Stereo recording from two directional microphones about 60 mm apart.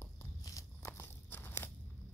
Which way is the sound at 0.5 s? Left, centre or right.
Left.